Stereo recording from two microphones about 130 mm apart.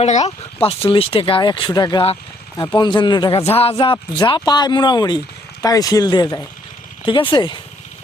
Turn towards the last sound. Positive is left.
turn(degrees=35)  # may be behind; listen again after turning